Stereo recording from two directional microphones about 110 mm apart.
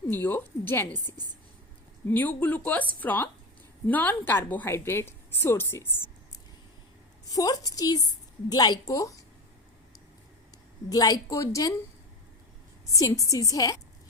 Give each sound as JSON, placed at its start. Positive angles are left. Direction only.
{"t": 0.1, "sound": "a woman's voice", "side_deg": 20}
{"t": 7.3, "sound": "a woman's voice", "side_deg": 35}
{"t": 10.8, "sound": "a woman's voice", "side_deg": 35}
{"t": 12.8, "sound": "a woman's voice", "side_deg": 30}